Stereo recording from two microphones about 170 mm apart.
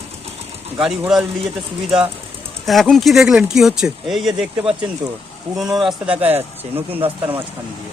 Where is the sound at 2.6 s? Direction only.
Centre (ahead or behind).